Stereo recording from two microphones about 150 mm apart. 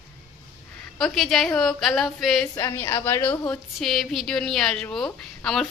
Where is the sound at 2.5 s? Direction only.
15° left (ahead or behind).